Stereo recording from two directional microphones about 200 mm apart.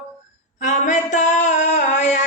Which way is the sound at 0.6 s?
40° left (ahead or behind).